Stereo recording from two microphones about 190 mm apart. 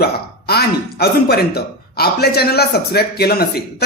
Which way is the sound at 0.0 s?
55° left (ahead or behind).